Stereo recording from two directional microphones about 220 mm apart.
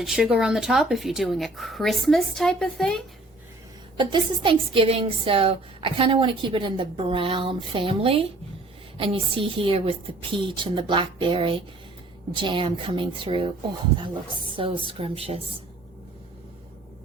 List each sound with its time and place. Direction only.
0.0 s speech: centre (ahead or behind)
3.9 s a woman's voice: 20° right (ahead or behind)